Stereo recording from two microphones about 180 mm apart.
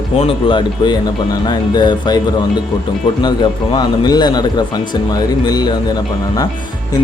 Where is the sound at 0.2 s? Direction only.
30° left (ahead or behind).